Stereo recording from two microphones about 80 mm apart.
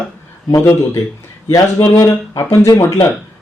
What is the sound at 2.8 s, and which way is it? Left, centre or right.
Speech, left.